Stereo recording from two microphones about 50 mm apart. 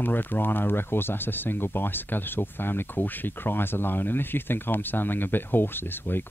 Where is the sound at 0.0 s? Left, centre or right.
Left.